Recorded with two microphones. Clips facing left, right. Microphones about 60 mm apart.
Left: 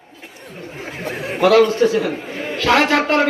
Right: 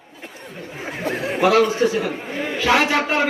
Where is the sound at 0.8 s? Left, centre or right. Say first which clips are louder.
Right 2 dB; centre.